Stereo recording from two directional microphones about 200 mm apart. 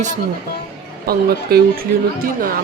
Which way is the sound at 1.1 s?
50° right (ahead or behind).